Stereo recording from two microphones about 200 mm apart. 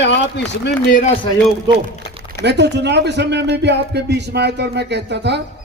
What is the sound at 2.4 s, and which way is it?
Speech, 60° right (ahead or behind).